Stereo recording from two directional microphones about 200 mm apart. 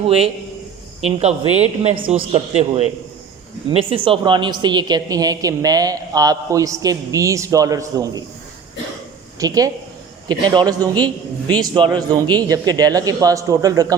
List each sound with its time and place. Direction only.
1.0 s a man's voice: 30° right (ahead or behind); by 8.2 s 15° right (ahead or behind)
9.4 s a woman's voice: 15° right (ahead or behind)